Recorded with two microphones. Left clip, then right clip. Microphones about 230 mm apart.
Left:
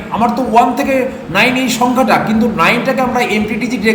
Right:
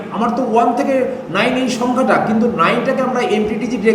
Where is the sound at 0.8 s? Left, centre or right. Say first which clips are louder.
Left 1 dB; centre.